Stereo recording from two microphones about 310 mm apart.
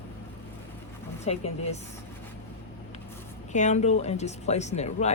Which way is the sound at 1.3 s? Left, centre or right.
Left.